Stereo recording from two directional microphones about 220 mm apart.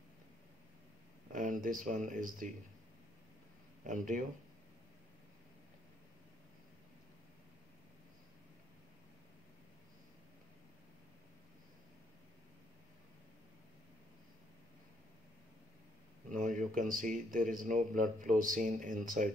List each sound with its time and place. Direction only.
1.3 s speech: 35° right (ahead or behind)
3.8 s speech: 35° right (ahead or behind)
16.3 s speech: 35° right (ahead or behind)